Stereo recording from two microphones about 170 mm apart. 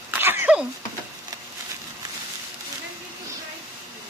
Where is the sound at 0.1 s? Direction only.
15° right (ahead or behind).